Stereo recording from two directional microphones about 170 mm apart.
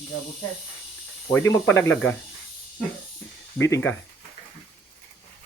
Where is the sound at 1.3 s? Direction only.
15° left (ahead or behind).